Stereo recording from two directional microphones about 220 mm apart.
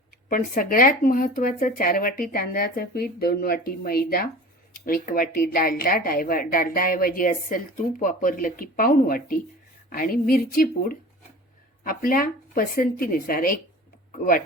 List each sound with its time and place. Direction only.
0.3 s speech: 40° left (ahead or behind)